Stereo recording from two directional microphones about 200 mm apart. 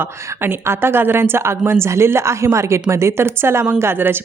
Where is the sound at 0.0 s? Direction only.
15° right (ahead or behind).